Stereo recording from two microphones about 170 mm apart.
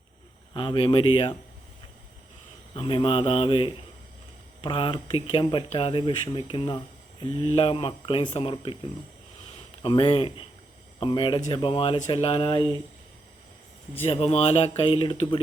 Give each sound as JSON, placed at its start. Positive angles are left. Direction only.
{"t": 0.5, "sound": "speech", "side_deg": 30}
{"t": 2.7, "sound": "speech", "side_deg": 35}
{"t": 9.8, "sound": "speech", "side_deg": 30}
{"t": 14.0, "sound": "speech", "side_deg": 35}